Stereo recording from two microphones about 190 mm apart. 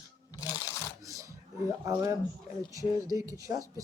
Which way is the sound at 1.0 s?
15° right (ahead or behind).